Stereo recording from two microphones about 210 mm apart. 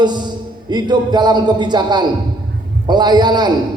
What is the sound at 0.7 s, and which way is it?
A man's voice, 20° right (ahead or behind).